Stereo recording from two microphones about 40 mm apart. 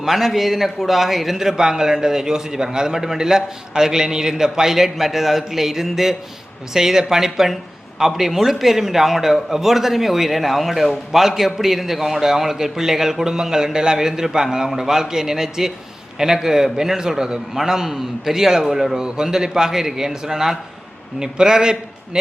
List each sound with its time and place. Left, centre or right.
0.0 s speech: centre